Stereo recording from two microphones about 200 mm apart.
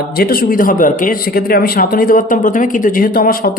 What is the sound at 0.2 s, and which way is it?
A woman's voice, 45° left (ahead or behind).